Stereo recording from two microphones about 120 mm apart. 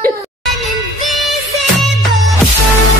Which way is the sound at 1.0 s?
Centre (ahead or behind).